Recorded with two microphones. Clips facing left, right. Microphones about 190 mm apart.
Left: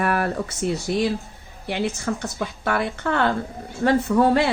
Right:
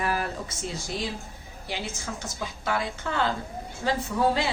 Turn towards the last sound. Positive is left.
turn(degrees=60)  # may be behind; listen again after turning